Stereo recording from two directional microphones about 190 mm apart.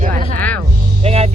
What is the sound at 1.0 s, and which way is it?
Music, 35° right (ahead or behind).